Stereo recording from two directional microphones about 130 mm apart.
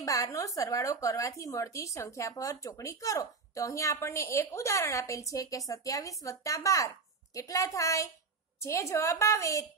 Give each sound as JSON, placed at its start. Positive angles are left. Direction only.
{"t": 0.0, "sound": "speech", "side_deg": 25}